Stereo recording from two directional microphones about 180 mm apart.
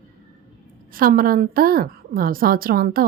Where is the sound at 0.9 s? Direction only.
50° right (ahead or behind).